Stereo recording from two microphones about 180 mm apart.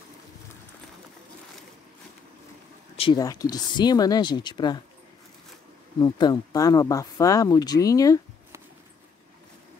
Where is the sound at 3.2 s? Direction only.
20° left (ahead or behind).